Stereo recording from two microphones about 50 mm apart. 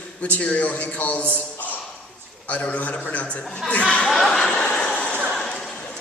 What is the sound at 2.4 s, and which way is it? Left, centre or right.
A man's voice, left.